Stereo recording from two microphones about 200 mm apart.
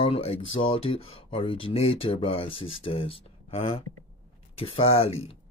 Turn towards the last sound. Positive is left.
turn(degrees=30)  # may be behind; listen again after turning